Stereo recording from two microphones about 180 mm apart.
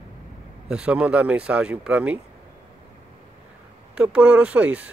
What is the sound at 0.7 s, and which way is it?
Speech, 5° right (ahead or behind).